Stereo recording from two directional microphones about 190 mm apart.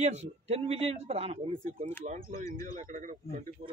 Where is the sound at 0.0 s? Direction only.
35° right (ahead or behind).